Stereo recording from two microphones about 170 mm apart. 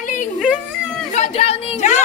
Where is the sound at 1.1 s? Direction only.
35° left (ahead or behind).